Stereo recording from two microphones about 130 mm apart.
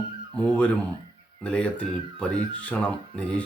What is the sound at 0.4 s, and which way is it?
Speech, 10° left (ahead or behind).